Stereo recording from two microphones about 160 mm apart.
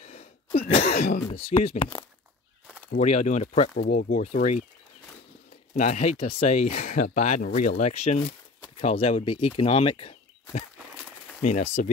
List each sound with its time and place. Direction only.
0.0 s a sound: 40° left (ahead or behind)
1.3 s speech: 35° left (ahead or behind)
2.6 s a sound: 10° right (ahead or behind)
3.0 s speech: 45° left (ahead or behind)
3.7 s speech: 60° left (ahead or behind)
5.8 s speech: 50° left (ahead or behind)
6.4 s speech: 50° left (ahead or behind)
8.3 s a sound: 50° left (ahead or behind)
8.9 s speech: 35° left (ahead or behind)
11.4 s speech: 45° left (ahead or behind)